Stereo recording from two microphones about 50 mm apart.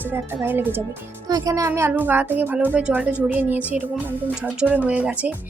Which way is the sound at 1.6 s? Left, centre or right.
Right.